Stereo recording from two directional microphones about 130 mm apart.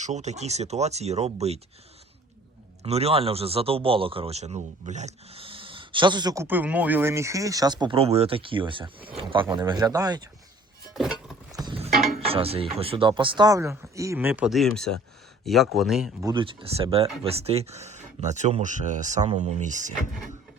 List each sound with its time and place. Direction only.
0.0 s speech: 60° right (ahead or behind)
2.8 s a man's voice: 50° right (ahead or behind); by 6.3 s 35° right (ahead or behind)
6.3 s speech: 20° right (ahead or behind); by 7.9 s 35° right (ahead or behind)
7.9 s a man's voice: 50° right (ahead or behind); by 10.2 s 30° right (ahead or behind)
10.9 s music: 5° right (ahead or behind)
12.3 s speech: 50° right (ahead or behind); by 14.5 s 15° right (ahead or behind)
14.5 s speech: centre (ahead or behind)
16.2 s speech: 40° right (ahead or behind); by 19.9 s 70° right (ahead or behind)